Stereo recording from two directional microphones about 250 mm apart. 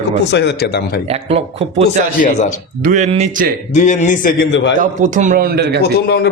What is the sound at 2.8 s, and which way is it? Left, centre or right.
Speech, right.